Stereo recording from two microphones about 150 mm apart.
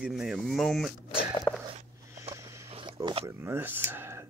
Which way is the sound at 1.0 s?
35° left (ahead or behind).